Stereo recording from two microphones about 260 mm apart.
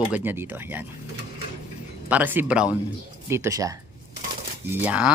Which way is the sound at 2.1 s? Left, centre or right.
Centre.